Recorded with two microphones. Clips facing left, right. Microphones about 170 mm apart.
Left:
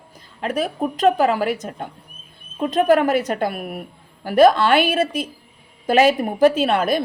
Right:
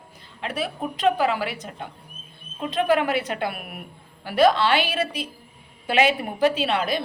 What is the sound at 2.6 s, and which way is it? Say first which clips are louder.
A woman's voice: left 5 dB; 45° left (ahead or behind).